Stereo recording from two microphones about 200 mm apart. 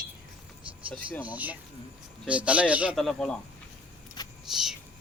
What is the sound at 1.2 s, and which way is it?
Speech, 5° right (ahead or behind).